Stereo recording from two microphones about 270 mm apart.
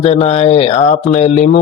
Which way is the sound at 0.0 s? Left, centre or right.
Left.